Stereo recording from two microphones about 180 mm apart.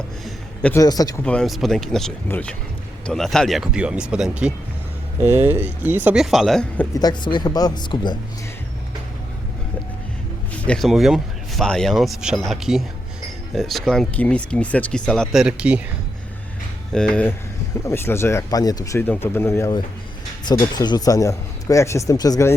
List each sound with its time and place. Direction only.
0.7 s a man's voice: 20° left (ahead or behind)
1.2 s speech: 5° left (ahead or behind)
6.9 s a man's voice: 25° left (ahead or behind)
10.7 s speech: centre (ahead or behind)
16.9 s a man's voice: 5° left (ahead or behind)